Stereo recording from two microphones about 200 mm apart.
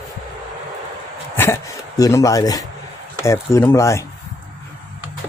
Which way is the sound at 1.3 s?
10° left (ahead or behind).